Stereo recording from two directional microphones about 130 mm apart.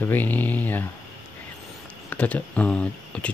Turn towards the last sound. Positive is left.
turn(degrees=10)  # may be behind; listen again after turning